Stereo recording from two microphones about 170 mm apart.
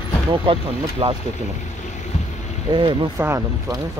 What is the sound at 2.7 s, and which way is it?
Speech, 25° right (ahead or behind).